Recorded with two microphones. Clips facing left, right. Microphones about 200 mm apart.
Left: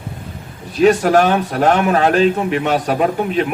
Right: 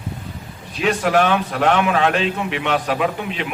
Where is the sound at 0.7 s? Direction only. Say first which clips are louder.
Left 7 dB; 40° left (ahead or behind).